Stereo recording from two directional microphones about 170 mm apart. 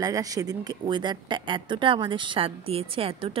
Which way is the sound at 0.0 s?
20° right (ahead or behind).